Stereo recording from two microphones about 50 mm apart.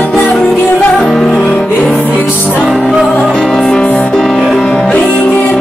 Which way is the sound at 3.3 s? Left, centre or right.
Centre.